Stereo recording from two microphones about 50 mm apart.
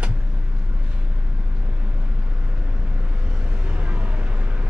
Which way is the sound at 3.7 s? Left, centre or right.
Right.